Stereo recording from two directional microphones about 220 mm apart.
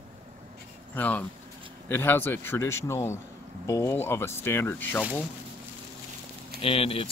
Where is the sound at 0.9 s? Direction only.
5° left (ahead or behind).